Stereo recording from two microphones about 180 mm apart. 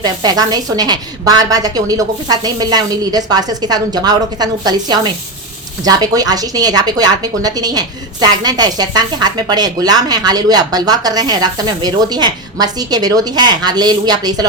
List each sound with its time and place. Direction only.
0.0 s a woman's voice: 20° right (ahead or behind)